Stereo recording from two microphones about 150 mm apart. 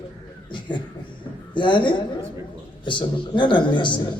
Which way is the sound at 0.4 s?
30° left (ahead or behind).